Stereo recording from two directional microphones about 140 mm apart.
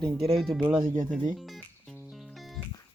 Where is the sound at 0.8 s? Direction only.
65° right (ahead or behind).